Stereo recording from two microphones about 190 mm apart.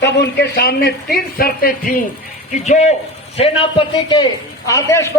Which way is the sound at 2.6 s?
40° left (ahead or behind).